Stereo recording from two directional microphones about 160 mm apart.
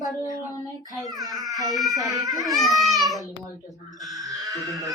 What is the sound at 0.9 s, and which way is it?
A child's voice, centre (ahead or behind).